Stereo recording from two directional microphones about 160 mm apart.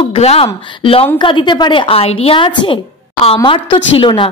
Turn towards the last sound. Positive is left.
turn(degrees=30)  # may be behind; listen again after turning